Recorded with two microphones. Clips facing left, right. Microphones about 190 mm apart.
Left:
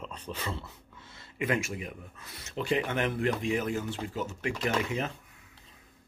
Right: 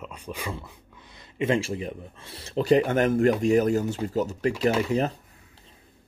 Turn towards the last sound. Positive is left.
turn(degrees=-35)  # may be behind; listen again after turning